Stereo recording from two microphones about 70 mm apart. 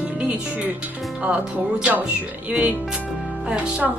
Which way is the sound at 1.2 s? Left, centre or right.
Centre.